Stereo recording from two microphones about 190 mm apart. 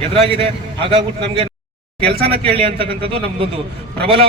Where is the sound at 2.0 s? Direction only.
55° right (ahead or behind).